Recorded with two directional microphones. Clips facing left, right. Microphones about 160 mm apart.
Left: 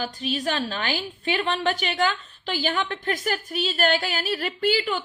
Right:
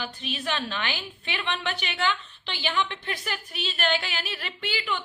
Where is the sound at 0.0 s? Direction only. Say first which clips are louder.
Left 6 dB; 40° left (ahead or behind).